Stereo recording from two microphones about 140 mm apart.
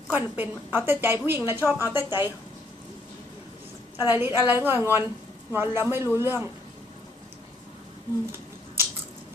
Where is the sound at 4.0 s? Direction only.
15° right (ahead or behind).